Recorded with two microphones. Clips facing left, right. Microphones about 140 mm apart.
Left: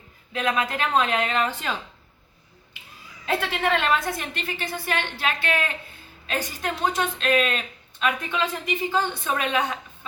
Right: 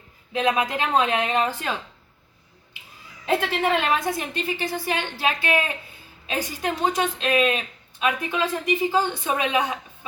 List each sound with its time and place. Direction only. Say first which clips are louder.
0.3 s a woman's voice: right 3 dB; 20° right (ahead or behind)
3.2 s speech: right 2 dB; 15° right (ahead or behind)